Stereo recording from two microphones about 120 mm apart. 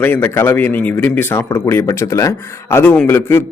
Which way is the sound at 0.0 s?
15° left (ahead or behind).